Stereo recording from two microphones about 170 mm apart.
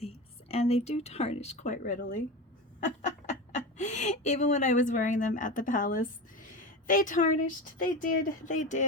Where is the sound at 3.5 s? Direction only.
45° left (ahead or behind).